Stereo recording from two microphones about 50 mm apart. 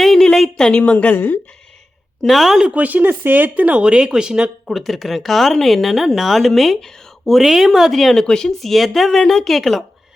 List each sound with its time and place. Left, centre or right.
0.0 s a sound: centre
0.3 s a woman's voice: centre; by 1.1 s left
1.1 s speech: left
2.2 s speech: centre
2.7 s speech: right; by 4.5 s centre
4.6 s speech: centre